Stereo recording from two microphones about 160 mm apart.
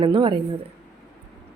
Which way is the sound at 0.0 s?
30° right (ahead or behind).